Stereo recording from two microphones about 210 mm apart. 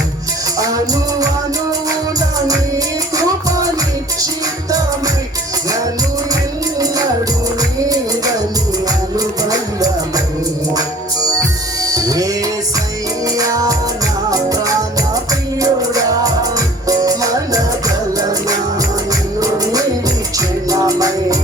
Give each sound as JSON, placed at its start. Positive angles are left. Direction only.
{"t": 0.6, "sound": "music", "side_deg": -15}
{"t": 6.3, "sound": "music", "side_deg": -15}